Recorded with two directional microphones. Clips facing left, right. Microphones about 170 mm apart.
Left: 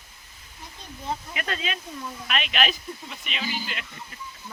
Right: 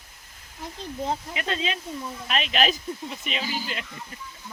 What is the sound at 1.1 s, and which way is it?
Speech, 25° right (ahead or behind).